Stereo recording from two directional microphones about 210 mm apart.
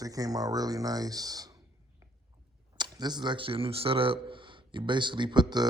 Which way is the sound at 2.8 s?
20° right (ahead or behind).